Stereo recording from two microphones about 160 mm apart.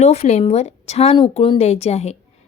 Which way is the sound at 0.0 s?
45° left (ahead or behind).